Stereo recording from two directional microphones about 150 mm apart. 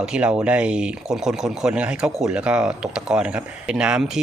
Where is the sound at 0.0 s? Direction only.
5° right (ahead or behind).